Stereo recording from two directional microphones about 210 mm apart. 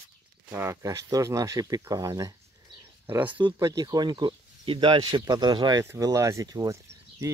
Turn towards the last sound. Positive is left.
turn(degrees=-15)  # may be behind; listen again after turning